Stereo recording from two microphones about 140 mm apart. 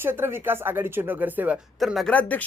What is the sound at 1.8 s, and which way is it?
Speech, centre (ahead or behind).